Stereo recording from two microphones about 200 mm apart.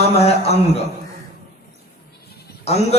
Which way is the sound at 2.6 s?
30° left (ahead or behind).